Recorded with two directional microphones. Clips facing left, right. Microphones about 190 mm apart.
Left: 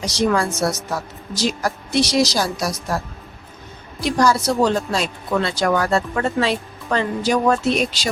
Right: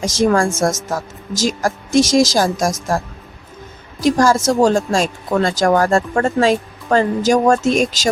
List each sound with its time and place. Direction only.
0.0 s speech: 45° right (ahead or behind)
4.0 s speech: 45° right (ahead or behind)